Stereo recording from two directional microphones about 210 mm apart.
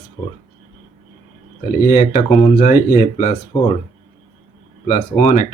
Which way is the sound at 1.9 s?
40° left (ahead or behind).